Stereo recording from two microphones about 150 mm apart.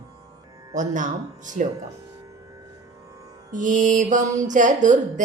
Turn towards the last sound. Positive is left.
turn(degrees=-55)  # may be behind; listen again after turning